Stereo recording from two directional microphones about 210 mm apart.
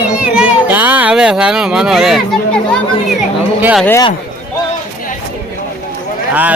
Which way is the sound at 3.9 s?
15° left (ahead or behind).